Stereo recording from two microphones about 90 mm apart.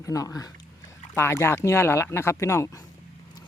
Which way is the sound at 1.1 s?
30° left (ahead or behind).